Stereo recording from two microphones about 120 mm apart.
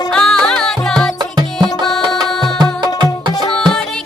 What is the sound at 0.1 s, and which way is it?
Music, 5° left (ahead or behind).